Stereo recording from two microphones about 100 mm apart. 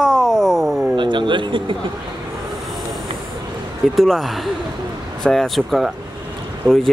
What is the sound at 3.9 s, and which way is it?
Speech, centre (ahead or behind).